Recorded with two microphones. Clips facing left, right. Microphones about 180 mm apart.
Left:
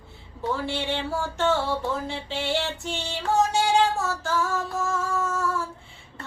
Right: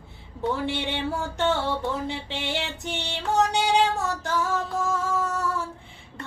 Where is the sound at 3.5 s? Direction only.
20° right (ahead or behind).